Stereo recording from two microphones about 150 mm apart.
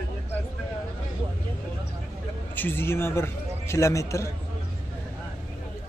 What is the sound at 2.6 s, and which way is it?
A man's voice, 15° left (ahead or behind).